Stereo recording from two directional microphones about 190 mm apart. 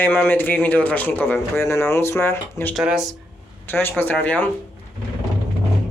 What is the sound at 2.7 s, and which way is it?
Speech, 5° right (ahead or behind).